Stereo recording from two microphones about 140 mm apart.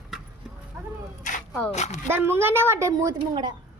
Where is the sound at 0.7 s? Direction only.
15° right (ahead or behind).